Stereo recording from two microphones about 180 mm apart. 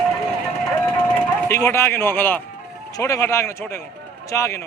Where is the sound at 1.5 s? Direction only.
15° left (ahead or behind).